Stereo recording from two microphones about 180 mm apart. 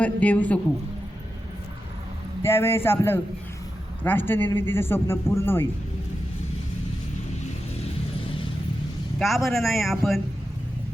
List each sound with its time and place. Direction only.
0.0 s a man's voice: 10° left (ahead or behind)
2.4 s a man's voice: 15° left (ahead or behind)
8.2 s vehicle: 30° left (ahead or behind)
9.1 s speech: centre (ahead or behind)